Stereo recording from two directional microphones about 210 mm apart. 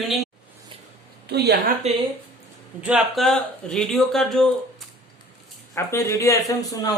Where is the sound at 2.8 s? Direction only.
5° right (ahead or behind).